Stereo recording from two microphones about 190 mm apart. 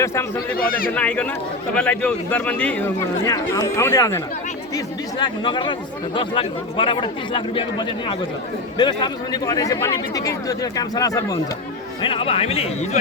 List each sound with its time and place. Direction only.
0.0 s a man's voice: 15° left (ahead or behind)
0.5 s a man's voice: 50° left (ahead or behind)
0.9 s a man's voice: 5° left (ahead or behind)
3.2 s a man's voice: 15° left (ahead or behind)
5.2 s speech: 25° left (ahead or behind)
12.0 s a man's voice: 30° left (ahead or behind)